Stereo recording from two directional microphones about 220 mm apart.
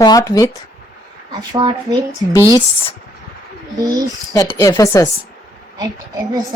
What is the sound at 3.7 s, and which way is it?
Speech, 15° right (ahead or behind).